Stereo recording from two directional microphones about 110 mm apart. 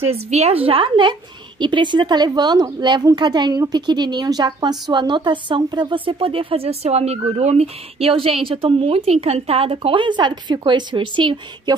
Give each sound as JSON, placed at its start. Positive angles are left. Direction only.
{"t": 0.1, "sound": "a woman's voice", "side_deg": -75}